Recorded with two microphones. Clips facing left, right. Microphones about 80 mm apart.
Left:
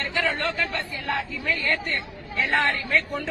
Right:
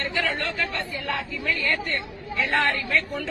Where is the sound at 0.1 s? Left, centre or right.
Left.